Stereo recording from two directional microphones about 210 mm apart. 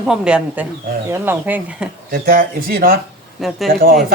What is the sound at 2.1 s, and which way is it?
A man's voice, 45° right (ahead or behind).